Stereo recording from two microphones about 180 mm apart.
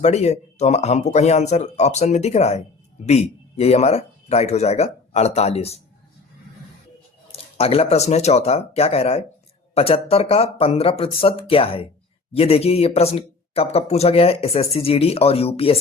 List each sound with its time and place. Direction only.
0.0 s speech: 40° left (ahead or behind)
7.3 s speech: 35° left (ahead or behind)